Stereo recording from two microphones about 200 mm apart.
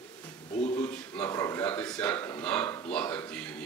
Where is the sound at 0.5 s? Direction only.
35° left (ahead or behind).